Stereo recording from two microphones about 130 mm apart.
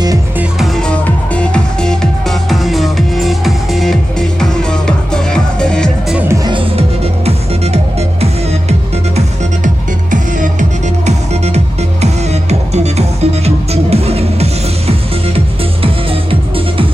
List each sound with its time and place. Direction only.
0.7 s music: 10° left (ahead or behind)
7.2 s music: 50° right (ahead or behind)
11.1 s music: 55° right (ahead or behind)